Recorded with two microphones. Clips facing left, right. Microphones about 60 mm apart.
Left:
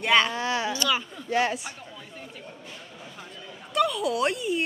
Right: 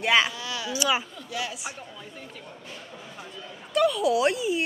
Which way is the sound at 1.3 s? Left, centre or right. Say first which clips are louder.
Left 8 dB; left.